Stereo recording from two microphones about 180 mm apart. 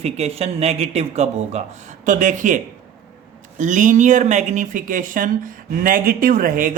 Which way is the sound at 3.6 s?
45° right (ahead or behind).